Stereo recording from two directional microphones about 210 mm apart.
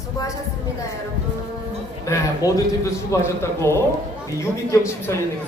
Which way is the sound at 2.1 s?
15° left (ahead or behind).